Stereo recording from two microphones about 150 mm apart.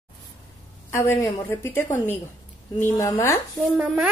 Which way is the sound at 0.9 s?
15° left (ahead or behind).